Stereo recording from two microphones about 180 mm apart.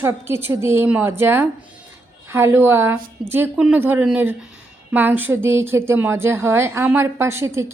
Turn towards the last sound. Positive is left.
turn(degrees=-15)  # may be behind; listen again after turning